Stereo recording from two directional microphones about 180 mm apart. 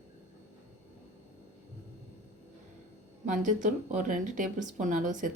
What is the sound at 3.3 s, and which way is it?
Speech, 45° right (ahead or behind).